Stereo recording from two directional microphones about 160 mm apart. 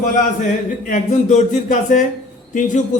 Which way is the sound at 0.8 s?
55° left (ahead or behind).